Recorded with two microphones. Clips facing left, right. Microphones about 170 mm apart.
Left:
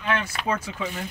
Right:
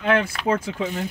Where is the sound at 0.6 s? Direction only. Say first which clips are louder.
Right 5 dB; 50° right (ahead or behind).